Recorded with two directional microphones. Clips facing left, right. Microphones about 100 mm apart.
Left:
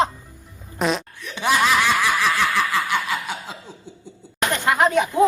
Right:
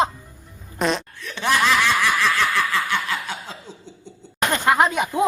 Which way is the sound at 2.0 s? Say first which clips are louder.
Even; 15° left (ahead or behind).